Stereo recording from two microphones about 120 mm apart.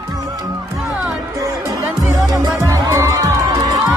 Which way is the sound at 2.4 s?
30° right (ahead or behind).